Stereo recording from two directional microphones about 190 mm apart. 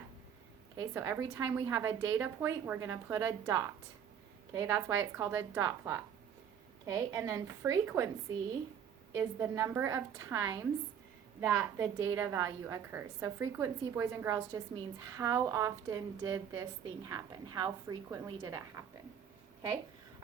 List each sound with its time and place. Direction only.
0.8 s a woman's voice: 15° right (ahead or behind)
9.1 s a woman's voice: 15° right (ahead or behind)